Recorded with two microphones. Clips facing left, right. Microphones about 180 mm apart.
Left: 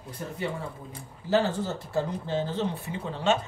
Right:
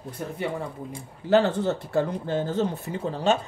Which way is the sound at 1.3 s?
60° right (ahead or behind).